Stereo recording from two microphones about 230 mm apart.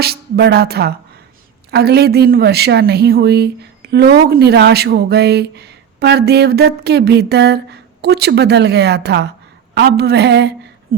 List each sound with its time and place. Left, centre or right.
0.0 s a woman's voice: right